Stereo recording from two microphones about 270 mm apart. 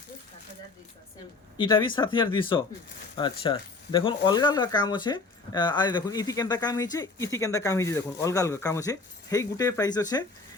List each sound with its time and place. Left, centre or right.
1.5 s speech: centre